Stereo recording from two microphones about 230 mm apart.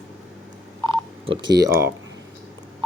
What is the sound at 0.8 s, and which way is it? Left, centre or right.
Telephone dialing, right.